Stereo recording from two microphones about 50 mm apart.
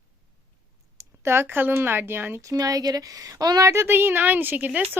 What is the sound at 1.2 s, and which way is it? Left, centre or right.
A woman's voice, right.